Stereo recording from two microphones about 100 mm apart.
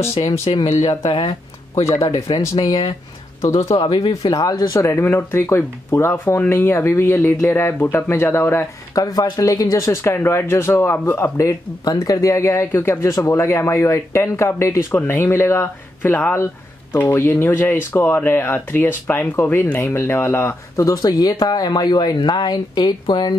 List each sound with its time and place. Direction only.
0.5 s speech: 60° left (ahead or behind)
1.9 s speech: 30° left (ahead or behind)
8.9 s speech: 40° left (ahead or behind); by 20.8 s 20° left (ahead or behind)
20.8 s speech: 40° left (ahead or behind)